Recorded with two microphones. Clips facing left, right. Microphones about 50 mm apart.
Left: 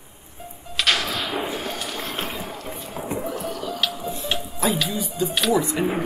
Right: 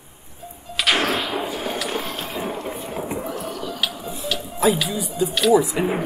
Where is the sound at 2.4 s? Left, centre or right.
Right.